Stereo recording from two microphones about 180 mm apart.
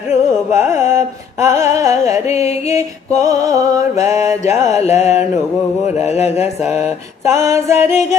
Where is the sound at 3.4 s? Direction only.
20° right (ahead or behind).